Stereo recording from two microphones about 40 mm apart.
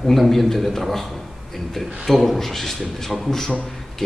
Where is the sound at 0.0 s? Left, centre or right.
Centre.